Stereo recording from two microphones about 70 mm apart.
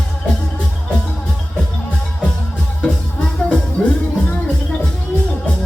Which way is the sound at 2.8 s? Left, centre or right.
Centre.